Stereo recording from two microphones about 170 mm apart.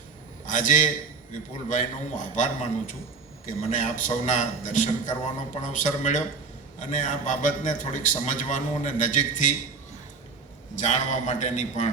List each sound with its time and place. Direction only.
0.4 s a man's voice: 50° left (ahead or behind)
10.8 s a man's voice: 45° left (ahead or behind)